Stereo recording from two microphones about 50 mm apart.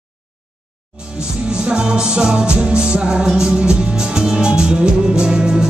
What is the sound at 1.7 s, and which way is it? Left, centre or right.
Music, centre.